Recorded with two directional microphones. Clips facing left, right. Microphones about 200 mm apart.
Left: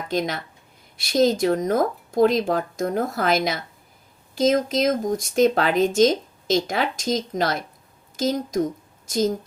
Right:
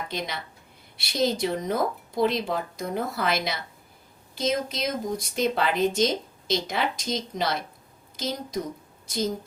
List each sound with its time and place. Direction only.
0.1 s a woman's voice: 50° left (ahead or behind)